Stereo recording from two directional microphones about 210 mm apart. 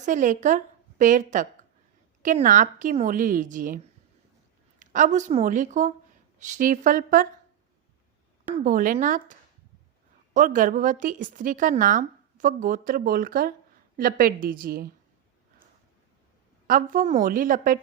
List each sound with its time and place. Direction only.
0.0 s a woman's voice: 35° right (ahead or behind)
4.8 s a woman's voice: 35° right (ahead or behind)
8.5 s a woman's voice: 40° right (ahead or behind)
10.3 s a woman's voice: 40° right (ahead or behind)
16.6 s a woman's voice: 40° right (ahead or behind)